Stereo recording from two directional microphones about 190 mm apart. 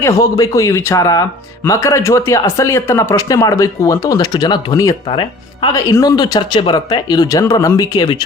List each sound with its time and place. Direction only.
0.0 s speech: 15° left (ahead or behind)